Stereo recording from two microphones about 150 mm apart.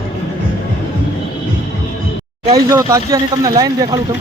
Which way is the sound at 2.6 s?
20° right (ahead or behind).